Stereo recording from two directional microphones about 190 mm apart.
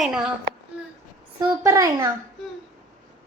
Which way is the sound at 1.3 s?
15° right (ahead or behind).